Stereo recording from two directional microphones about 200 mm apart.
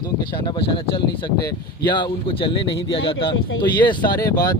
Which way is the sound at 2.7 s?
60° left (ahead or behind).